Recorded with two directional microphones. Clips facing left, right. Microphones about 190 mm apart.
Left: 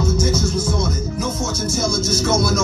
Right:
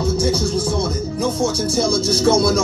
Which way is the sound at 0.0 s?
30° right (ahead or behind).